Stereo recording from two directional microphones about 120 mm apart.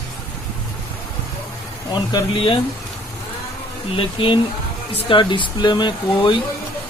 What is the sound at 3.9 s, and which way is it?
Speech, 45° left (ahead or behind).